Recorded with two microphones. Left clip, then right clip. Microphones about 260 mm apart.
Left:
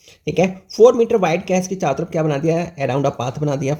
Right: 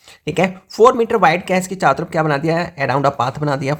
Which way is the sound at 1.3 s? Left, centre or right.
Right.